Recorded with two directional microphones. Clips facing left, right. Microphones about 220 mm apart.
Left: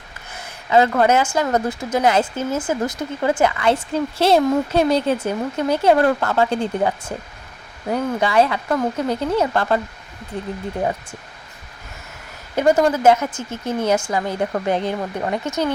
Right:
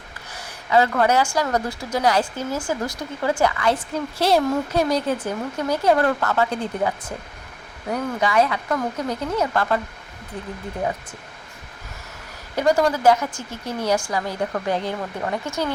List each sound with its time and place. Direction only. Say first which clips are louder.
0.3 s a woman's voice: left 2 dB; 25° left (ahead or behind)
12.5 s a woman's voice: left 3 dB; 20° left (ahead or behind)